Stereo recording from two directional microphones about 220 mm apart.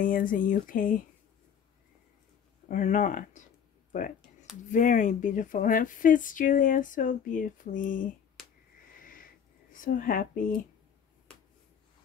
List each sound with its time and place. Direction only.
0.0 s speech: 40° left (ahead or behind)
2.7 s speech: 35° left (ahead or behind)
8.4 s a sound: centre (ahead or behind)
9.7 s speech: 40° left (ahead or behind)